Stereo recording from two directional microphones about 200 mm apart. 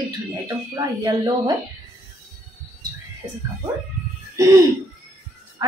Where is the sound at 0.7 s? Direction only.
20° right (ahead or behind).